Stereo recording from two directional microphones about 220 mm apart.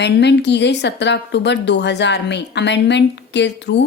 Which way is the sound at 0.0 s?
50° left (ahead or behind).